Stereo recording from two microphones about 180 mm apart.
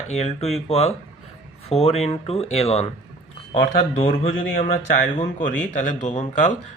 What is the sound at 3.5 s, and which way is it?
A man's voice, 45° left (ahead or behind).